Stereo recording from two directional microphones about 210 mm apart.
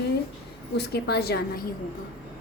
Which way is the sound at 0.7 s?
50° left (ahead or behind).